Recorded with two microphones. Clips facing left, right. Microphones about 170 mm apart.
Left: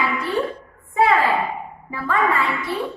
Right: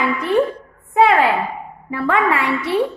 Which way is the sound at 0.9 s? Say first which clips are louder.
Right 3 dB; 75° right (ahead or behind).